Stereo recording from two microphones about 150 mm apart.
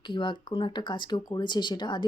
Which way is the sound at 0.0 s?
30° left (ahead or behind).